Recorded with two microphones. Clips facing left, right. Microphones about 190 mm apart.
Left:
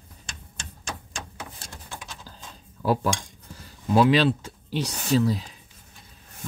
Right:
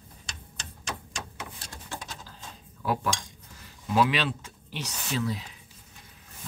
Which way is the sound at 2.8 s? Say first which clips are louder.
Left 5 dB; 30° left (ahead or behind).